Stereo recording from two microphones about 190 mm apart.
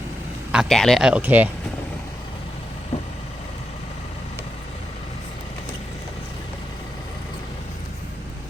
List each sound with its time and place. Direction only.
0.5 s speech: centre (ahead or behind)
2.9 s vehicle: 35° left (ahead or behind)